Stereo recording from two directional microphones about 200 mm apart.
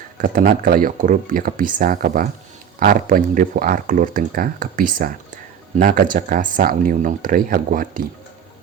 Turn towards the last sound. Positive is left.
turn(degrees=-45)  # may be behind; listen again after turning